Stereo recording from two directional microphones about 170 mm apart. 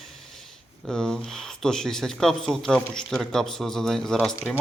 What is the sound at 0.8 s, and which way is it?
Speech, 5° left (ahead or behind).